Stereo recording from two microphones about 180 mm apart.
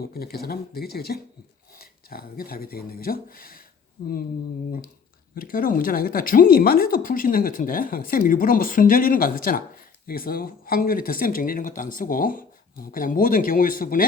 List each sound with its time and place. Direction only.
0.0 s speech: 60° left (ahead or behind)
5.3 s speech: 50° left (ahead or behind)